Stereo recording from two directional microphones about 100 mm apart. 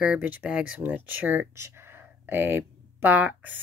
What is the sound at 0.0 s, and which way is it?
Speech, 15° right (ahead or behind).